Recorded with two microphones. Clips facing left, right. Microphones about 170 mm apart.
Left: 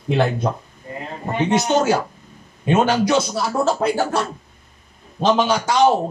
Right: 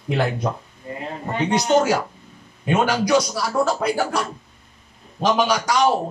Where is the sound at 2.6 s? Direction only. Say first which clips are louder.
Left 3 dB; 25° left (ahead or behind).